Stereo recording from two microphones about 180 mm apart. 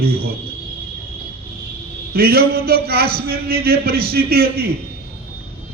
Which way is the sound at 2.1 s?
60° right (ahead or behind).